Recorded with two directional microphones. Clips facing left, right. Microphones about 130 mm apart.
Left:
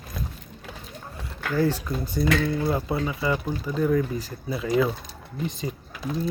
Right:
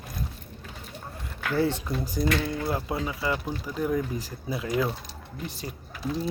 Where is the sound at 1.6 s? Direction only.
20° right (ahead or behind).